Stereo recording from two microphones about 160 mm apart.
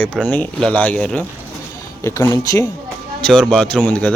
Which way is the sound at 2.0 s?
15° left (ahead or behind).